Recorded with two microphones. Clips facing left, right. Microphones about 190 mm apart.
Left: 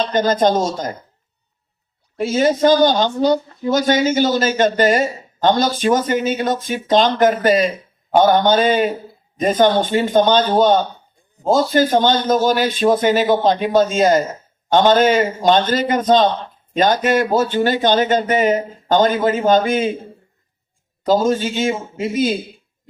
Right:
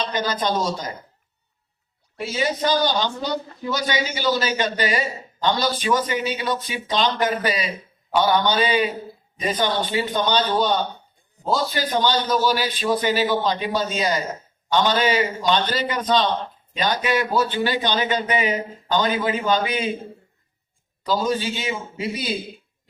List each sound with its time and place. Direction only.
0.0 s speech: 50° left (ahead or behind)
2.1 s speech: 45° left (ahead or behind)
21.0 s speech: 45° left (ahead or behind)